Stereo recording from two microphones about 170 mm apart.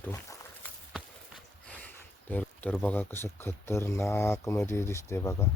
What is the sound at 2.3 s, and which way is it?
Speech, 10° left (ahead or behind).